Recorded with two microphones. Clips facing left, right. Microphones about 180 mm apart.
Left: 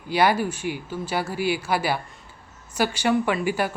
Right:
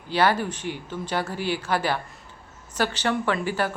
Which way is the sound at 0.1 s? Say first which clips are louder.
Left 1 dB; 10° left (ahead or behind).